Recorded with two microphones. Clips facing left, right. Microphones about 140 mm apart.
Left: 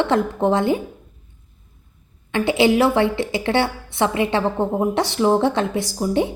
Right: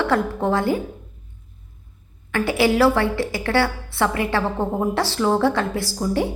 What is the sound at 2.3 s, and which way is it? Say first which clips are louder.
A woman's voice: left 2 dB; 20° left (ahead or behind).